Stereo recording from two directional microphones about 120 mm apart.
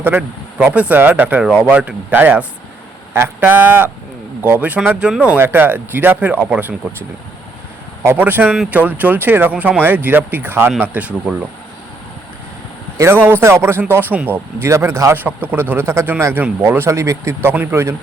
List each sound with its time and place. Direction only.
0.0 s speech: 10° right (ahead or behind)
8.0 s speech: 15° right (ahead or behind)
13.0 s speech: 20° right (ahead or behind)